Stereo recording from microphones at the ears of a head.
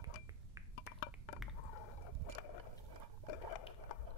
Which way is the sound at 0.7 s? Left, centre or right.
Left.